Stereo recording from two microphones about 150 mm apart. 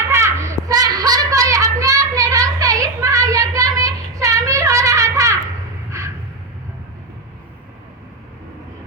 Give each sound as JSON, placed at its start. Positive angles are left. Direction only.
{"t": 0.1, "sound": "child singing", "side_deg": -20}